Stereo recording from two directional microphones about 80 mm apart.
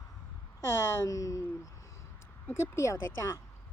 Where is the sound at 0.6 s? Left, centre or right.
Left.